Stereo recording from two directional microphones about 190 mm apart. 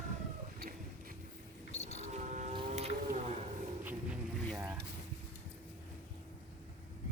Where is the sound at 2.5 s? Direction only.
35° right (ahead or behind).